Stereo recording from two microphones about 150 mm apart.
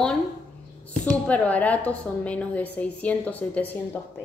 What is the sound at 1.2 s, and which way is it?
A woman's voice, 10° left (ahead or behind).